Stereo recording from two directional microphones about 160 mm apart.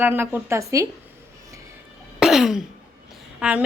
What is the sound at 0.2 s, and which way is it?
Speech, 15° right (ahead or behind).